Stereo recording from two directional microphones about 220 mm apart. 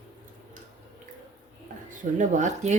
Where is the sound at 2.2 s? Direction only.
35° right (ahead or behind).